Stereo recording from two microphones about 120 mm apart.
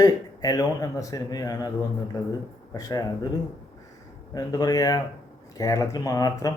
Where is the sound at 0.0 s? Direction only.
30° left (ahead or behind).